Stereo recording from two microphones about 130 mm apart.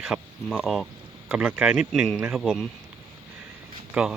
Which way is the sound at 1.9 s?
5° left (ahead or behind).